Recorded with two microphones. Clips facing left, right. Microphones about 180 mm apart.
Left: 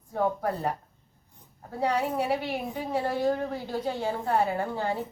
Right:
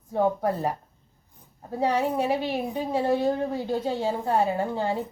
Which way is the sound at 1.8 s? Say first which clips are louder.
Right 3 dB; 25° right (ahead or behind).